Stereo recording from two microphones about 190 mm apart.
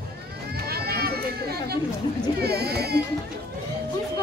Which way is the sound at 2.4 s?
55° right (ahead or behind).